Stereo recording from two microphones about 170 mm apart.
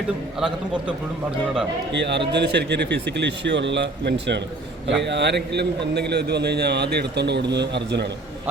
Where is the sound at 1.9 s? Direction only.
90° right.